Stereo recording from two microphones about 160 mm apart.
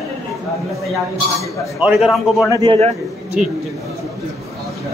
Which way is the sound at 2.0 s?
Centre (ahead or behind).